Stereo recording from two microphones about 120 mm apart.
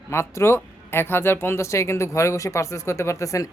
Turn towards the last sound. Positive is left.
turn(degrees=25)  # may be behind; listen again after turning